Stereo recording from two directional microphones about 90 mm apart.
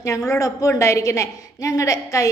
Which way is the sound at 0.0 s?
35° left (ahead or behind).